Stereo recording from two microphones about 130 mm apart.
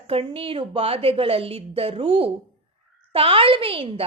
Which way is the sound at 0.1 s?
45° right (ahead or behind).